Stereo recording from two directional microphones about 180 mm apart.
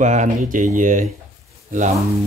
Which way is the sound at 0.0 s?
40° right (ahead or behind).